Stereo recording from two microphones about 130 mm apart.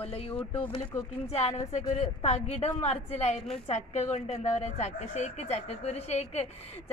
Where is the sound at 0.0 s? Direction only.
50° left (ahead or behind).